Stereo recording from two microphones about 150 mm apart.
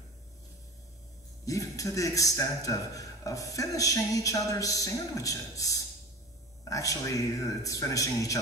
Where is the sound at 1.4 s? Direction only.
20° left (ahead or behind).